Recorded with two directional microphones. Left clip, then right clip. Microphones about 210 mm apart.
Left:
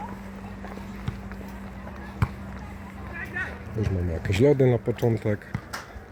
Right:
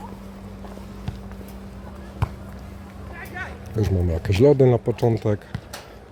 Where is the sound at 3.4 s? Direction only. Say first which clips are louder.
Left 2 dB; 50° left (ahead or behind).